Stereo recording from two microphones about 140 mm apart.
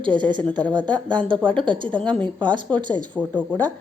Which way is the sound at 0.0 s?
35° right (ahead or behind).